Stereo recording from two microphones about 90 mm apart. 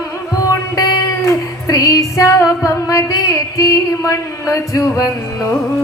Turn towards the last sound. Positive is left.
turn(degrees=40)  # may be behind; listen again after turning